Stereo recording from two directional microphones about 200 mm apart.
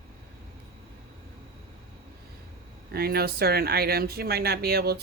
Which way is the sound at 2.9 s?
50° right (ahead or behind).